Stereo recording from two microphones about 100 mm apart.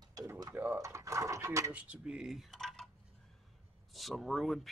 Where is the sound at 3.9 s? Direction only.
Centre (ahead or behind).